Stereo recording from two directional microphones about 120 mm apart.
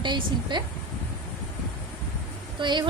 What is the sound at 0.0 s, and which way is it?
Speech, 40° right (ahead or behind).